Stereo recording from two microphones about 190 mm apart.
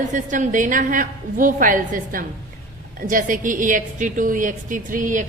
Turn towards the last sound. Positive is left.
turn(degrees=-45)  # may be behind; listen again after turning